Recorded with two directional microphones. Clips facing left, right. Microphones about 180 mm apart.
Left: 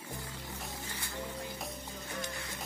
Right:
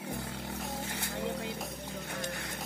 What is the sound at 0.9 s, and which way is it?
Music, 70° right (ahead or behind).